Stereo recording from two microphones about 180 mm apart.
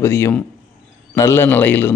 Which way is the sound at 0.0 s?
15° left (ahead or behind).